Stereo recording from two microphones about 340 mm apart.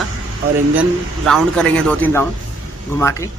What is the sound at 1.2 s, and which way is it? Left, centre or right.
Speech, centre.